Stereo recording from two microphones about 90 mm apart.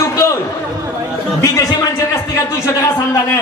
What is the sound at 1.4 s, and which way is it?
A man's voice, 40° left (ahead or behind).